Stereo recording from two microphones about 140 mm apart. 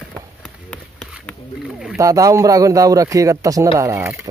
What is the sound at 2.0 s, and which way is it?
Speech, 25° right (ahead or behind).